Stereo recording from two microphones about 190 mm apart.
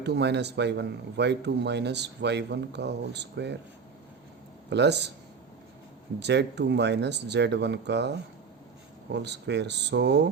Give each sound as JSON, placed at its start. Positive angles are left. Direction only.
{"t": 0.0, "sound": "a man's voice", "side_deg": -60}
{"t": 4.7, "sound": "a man's voice", "side_deg": -65}
{"t": 6.1, "sound": "a man's voice", "side_deg": -65}
{"t": 9.1, "sound": "a man's voice", "side_deg": -65}